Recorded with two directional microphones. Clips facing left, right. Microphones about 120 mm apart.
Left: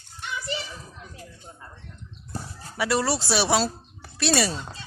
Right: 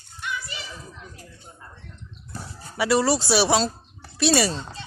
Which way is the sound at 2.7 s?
Centre (ahead or behind).